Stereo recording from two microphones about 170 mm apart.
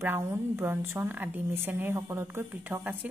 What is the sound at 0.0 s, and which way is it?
A woman's voice, 15° right (ahead or behind).